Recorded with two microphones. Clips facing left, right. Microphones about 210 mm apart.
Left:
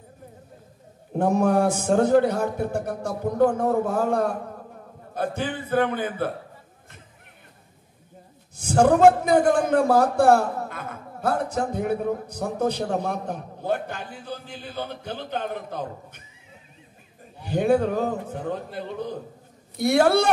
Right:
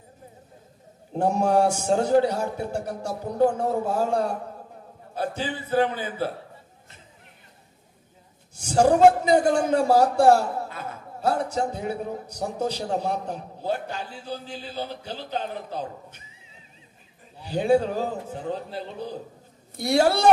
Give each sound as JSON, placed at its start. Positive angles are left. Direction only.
{"t": 1.1, "sound": "a man's voice", "side_deg": 55}
{"t": 8.5, "sound": "a man's voice", "side_deg": 55}
{"t": 17.4, "sound": "a man's voice", "side_deg": 55}